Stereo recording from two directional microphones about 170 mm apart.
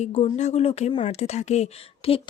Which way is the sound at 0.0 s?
40° left (ahead or behind).